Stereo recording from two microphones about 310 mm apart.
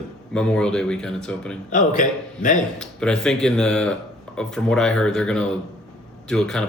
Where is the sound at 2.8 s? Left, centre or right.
Centre.